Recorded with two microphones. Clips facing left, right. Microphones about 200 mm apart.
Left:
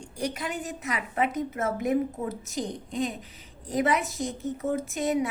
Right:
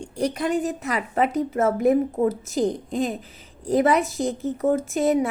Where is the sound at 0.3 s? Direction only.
35° right (ahead or behind).